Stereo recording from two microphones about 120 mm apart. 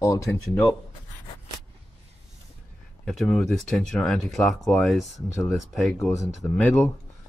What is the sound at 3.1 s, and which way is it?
Speech, centre (ahead or behind).